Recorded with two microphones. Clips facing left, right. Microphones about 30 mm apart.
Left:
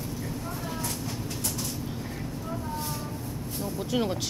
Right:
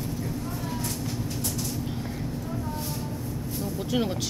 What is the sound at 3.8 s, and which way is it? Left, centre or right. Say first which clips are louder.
Vehicle: even; centre.